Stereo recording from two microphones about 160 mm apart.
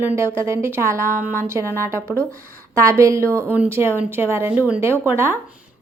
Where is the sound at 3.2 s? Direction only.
10° left (ahead or behind).